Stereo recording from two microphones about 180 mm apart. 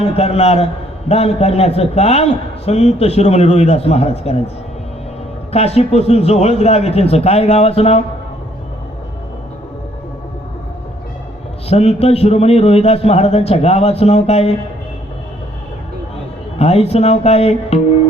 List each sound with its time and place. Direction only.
0.0 s a man's voice: 35° left (ahead or behind)
5.5 s a man's voice: 35° left (ahead or behind)
11.7 s a man's voice: 35° left (ahead or behind)
16.6 s a man's voice: 35° left (ahead or behind)